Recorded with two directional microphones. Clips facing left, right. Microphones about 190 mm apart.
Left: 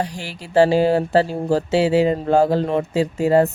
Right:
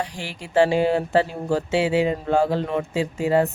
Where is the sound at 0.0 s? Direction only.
40° left (ahead or behind).